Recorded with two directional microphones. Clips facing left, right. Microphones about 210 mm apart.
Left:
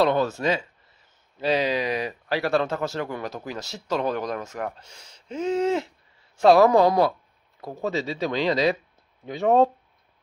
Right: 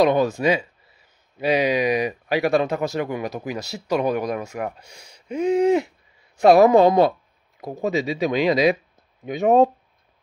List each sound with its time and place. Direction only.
0.0 s speech: 15° right (ahead or behind)